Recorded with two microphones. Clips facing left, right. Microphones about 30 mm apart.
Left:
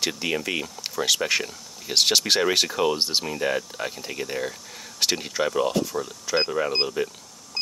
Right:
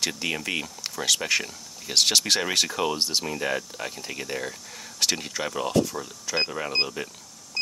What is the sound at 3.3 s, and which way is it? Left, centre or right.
Speech, centre.